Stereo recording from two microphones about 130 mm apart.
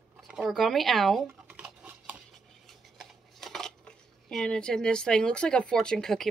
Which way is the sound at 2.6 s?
Centre (ahead or behind).